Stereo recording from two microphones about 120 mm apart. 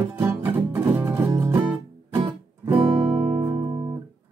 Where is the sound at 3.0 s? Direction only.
Centre (ahead or behind).